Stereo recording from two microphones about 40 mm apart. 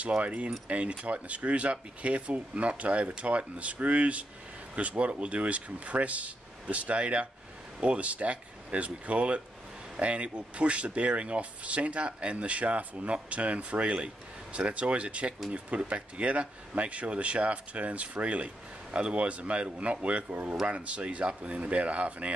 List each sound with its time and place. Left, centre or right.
0.2 s speech: right